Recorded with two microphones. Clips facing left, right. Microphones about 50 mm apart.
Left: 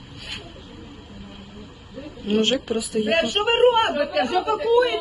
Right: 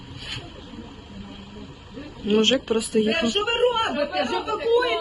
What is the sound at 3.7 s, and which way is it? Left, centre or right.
Speech, centre.